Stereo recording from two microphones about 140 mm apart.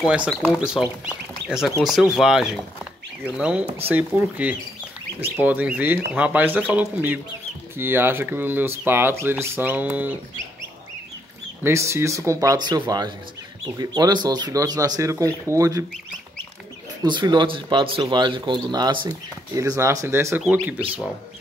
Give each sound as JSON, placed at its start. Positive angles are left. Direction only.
{"t": 0.0, "sound": "speech", "side_deg": -10}
{"t": 11.6, "sound": "speech", "side_deg": -20}
{"t": 17.0, "sound": "speech", "side_deg": -35}